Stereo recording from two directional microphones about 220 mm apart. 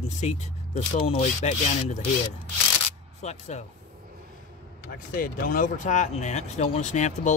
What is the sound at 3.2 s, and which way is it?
Speech, 30° left (ahead or behind).